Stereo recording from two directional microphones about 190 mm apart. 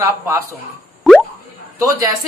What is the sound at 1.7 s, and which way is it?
Speech, 15° right (ahead or behind).